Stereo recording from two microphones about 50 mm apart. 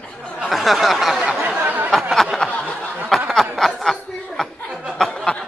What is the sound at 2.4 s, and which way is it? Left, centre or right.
Snicker, left.